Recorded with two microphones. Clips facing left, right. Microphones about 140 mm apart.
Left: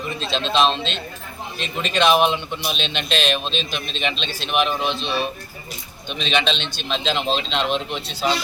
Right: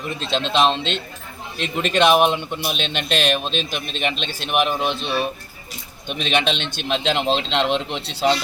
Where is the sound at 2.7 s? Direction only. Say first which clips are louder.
Right 1 dB; 55° right (ahead or behind).